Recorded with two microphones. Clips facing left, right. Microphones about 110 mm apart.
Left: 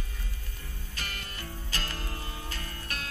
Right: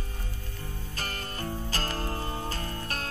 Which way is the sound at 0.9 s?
40° right (ahead or behind).